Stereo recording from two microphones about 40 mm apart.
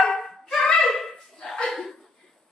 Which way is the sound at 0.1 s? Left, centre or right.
Centre.